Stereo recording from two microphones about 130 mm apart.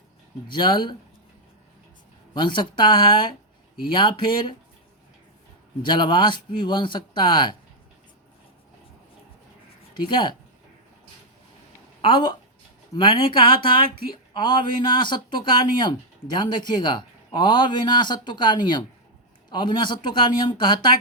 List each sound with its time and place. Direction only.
0.5 s a man's voice: 35° left (ahead or behind)
2.3 s a man's voice: 35° left (ahead or behind)
5.8 s a man's voice: 40° left (ahead or behind)
9.9 s speech: 40° left (ahead or behind)
12.0 s a man's voice: 40° left (ahead or behind)